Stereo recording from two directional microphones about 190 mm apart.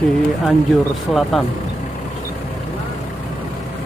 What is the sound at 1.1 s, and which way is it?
Speech, centre (ahead or behind).